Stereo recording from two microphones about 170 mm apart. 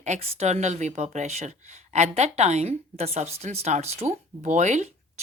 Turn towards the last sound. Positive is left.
turn(degrees=-45)  # may be behind; listen again after turning